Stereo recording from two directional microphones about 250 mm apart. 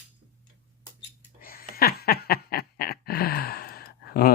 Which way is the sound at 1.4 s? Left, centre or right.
Left.